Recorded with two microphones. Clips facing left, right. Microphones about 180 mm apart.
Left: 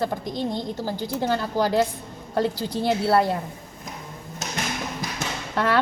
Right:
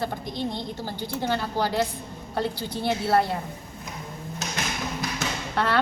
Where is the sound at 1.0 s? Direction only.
45° left (ahead or behind).